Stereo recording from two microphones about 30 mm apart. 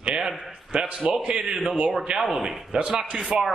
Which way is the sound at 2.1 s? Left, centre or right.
Right.